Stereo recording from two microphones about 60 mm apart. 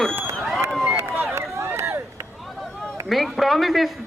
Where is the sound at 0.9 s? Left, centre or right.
Right.